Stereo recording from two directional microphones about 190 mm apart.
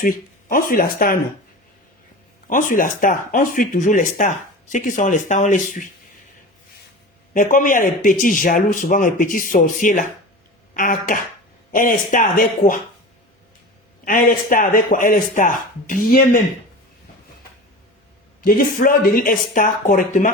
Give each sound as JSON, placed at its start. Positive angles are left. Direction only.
{"t": 0.0, "sound": "speech", "side_deg": 45}
{"t": 2.5, "sound": "speech", "side_deg": 45}
{"t": 7.3, "sound": "speech", "side_deg": 45}
{"t": 14.0, "sound": "speech", "side_deg": 45}
{"t": 18.4, "sound": "speech", "side_deg": 45}